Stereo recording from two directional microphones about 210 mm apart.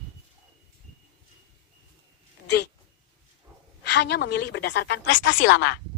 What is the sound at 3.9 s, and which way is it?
A woman's voice, 55° left (ahead or behind).